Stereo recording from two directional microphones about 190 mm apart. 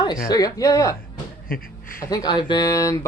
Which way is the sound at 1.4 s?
50° left (ahead or behind).